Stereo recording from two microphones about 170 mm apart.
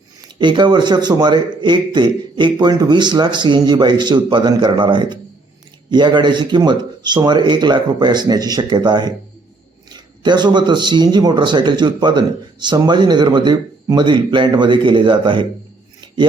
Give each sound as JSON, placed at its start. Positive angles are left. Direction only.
{"t": 0.3, "sound": "speech", "side_deg": -25}